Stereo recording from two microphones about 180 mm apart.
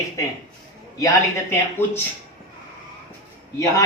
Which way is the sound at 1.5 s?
10° left (ahead or behind).